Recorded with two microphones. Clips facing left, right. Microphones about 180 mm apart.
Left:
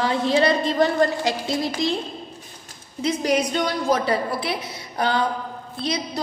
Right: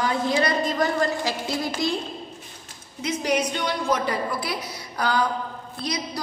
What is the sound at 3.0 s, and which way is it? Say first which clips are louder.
A woman's voice: left 3 dB; 35° left (ahead or behind).